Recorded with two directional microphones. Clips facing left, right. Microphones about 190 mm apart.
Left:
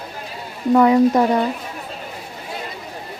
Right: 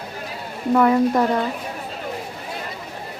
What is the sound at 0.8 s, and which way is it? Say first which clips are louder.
Speech: left 3 dB; 15° left (ahead or behind).